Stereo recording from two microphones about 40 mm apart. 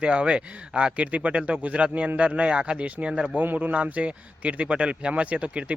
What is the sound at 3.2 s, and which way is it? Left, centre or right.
A man's voice, right.